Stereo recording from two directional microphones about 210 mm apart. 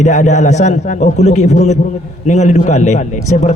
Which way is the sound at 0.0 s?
35° left (ahead or behind).